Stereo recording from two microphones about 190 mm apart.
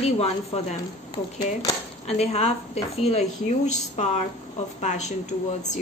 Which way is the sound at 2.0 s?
35° left (ahead or behind).